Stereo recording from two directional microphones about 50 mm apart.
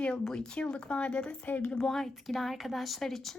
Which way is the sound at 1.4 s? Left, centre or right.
Left.